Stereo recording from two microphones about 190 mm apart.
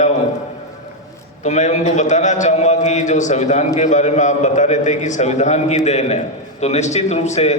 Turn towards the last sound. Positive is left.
turn(degrees=35)  # may be behind; listen again after turning